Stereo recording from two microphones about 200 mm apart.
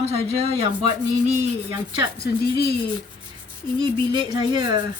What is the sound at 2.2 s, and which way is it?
Speech, 50° left (ahead or behind).